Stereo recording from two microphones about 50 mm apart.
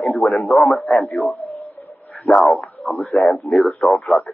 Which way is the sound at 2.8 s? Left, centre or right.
Left.